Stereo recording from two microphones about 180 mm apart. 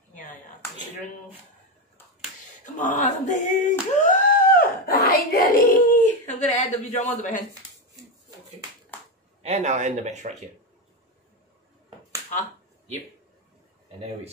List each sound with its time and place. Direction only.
0.1 s a sound: 45° left (ahead or behind)
2.6 s singing: 45° left (ahead or behind)
9.4 s speech: 40° right (ahead or behind)